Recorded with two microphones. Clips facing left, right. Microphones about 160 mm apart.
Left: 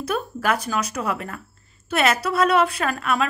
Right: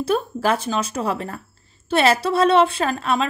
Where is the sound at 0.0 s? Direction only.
30° right (ahead or behind).